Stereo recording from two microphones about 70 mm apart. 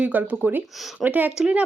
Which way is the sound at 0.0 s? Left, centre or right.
Right.